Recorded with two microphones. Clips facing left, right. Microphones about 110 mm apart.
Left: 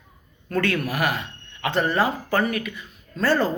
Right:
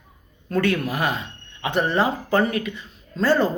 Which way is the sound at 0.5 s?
15° right (ahead or behind).